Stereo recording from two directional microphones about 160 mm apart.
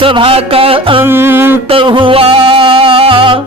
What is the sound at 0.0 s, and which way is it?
Music, 35° right (ahead or behind).